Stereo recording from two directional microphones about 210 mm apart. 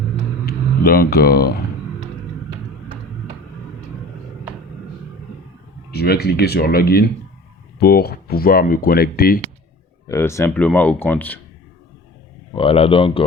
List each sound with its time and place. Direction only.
0.4 s speech: 45° left (ahead or behind)
5.9 s speech: 50° left (ahead or behind)
10.1 s speech: 15° left (ahead or behind)
12.5 s speech: 25° left (ahead or behind)